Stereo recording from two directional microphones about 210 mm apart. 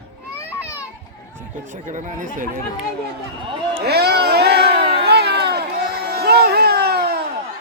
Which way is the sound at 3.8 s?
50° right (ahead or behind).